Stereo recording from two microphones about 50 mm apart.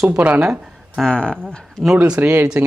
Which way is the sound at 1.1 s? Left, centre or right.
Centre.